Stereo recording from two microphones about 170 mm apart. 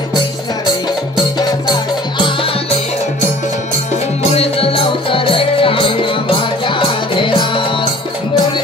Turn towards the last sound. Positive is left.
turn(degrees=30)  # may be behind; listen again after turning